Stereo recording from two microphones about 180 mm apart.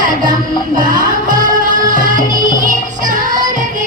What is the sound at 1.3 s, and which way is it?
Music, 45° right (ahead or behind).